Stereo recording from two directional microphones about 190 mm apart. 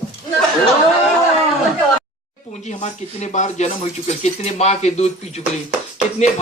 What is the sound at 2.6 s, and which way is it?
Speech, 40° left (ahead or behind).